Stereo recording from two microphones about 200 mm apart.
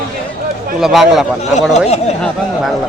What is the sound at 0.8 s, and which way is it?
Speech, centre (ahead or behind).